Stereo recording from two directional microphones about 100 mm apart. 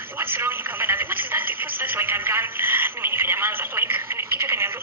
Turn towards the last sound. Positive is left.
turn(degrees=-25)  # may be behind; listen again after turning